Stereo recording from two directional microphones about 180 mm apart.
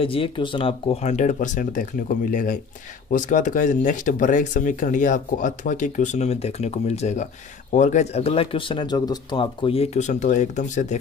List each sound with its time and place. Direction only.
0.0 s speech: 30° left (ahead or behind)